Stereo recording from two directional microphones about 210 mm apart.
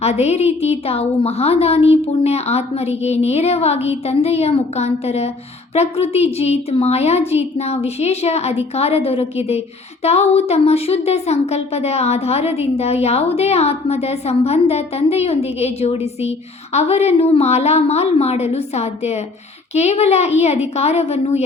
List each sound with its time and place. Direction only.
0.0 s a woman's voice: 30° left (ahead or behind)